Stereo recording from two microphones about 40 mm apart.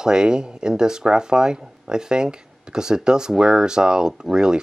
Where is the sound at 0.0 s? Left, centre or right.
Centre.